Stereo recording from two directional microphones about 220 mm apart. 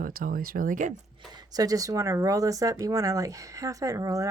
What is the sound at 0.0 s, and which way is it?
Speech, 40° right (ahead or behind).